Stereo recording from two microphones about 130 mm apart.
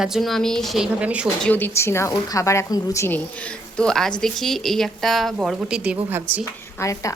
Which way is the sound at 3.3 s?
10° left (ahead or behind).